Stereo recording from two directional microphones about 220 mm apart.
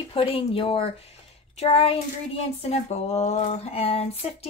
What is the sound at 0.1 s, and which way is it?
Speech, 25° left (ahead or behind).